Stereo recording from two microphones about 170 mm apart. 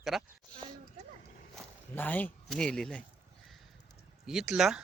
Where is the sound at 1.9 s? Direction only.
10° left (ahead or behind).